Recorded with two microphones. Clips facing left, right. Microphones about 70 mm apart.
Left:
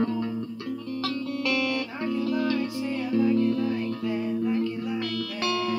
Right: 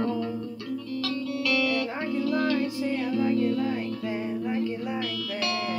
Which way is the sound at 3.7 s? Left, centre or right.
Right.